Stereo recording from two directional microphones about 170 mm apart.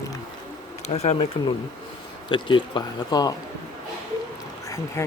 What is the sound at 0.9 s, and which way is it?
Speech, 40° left (ahead or behind).